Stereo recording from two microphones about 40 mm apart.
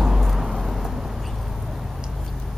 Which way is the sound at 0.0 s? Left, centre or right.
Centre.